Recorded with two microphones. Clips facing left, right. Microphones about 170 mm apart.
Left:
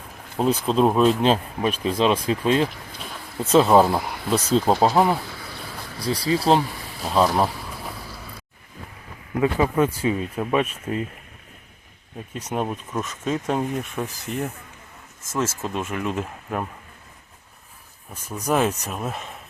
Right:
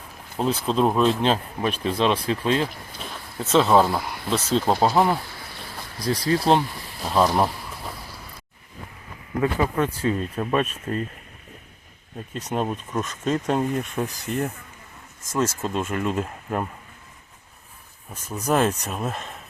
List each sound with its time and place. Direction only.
0.6 s speech: centre (ahead or behind)
3.5 s speech: 10° left (ahead or behind)
6.0 s speech: 30° left (ahead or behind)
6.2 s speech: 5° left (ahead or behind)
9.4 s speech: 10° left (ahead or behind)
12.3 s speech: 10° left (ahead or behind)
18.1 s speech: 10° left (ahead or behind)